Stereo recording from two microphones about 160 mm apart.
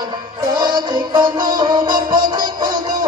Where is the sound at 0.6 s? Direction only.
25° right (ahead or behind).